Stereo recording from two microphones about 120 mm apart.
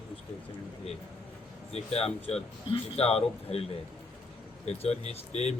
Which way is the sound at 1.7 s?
55° left (ahead or behind).